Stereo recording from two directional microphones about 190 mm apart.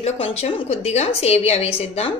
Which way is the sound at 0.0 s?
35° left (ahead or behind).